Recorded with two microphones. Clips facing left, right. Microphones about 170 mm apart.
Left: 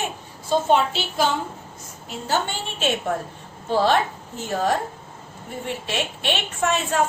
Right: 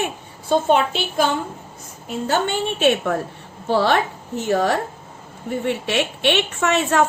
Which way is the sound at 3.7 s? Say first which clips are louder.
Right 2 dB; 70° right (ahead or behind).